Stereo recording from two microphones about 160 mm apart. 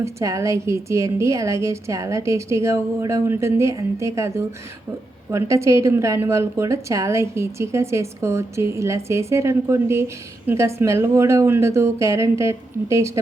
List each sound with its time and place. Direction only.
0.0 s a woman's voice: 20° right (ahead or behind)